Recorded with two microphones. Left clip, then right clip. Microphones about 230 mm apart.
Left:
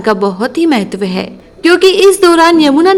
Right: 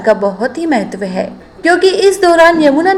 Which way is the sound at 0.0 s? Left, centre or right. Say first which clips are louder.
Right 1 dB; left.